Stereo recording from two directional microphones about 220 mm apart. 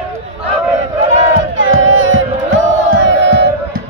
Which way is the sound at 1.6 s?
65° right (ahead or behind).